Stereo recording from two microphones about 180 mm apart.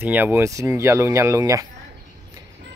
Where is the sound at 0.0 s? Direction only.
10° right (ahead or behind).